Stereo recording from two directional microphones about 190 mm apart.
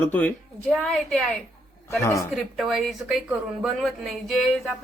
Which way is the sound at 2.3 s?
Centre (ahead or behind).